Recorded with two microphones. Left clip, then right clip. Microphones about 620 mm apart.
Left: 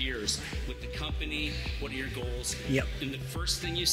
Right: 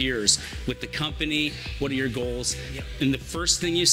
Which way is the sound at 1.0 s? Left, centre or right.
Right.